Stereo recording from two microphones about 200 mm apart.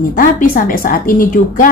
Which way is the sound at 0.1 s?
45° left (ahead or behind).